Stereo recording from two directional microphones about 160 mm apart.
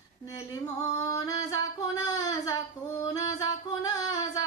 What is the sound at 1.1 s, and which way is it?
Female singing, 20° left (ahead or behind).